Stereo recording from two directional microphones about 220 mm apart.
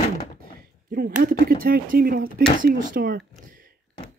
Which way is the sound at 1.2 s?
40° right (ahead or behind).